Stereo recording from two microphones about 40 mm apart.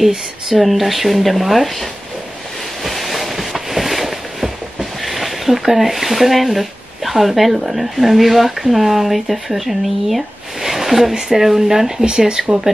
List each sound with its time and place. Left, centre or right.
0.6 s speech: centre
2.8 s a sound: centre
12.0 s speech: right